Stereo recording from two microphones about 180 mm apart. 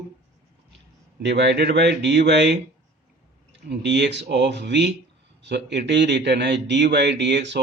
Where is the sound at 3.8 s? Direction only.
75° right (ahead or behind).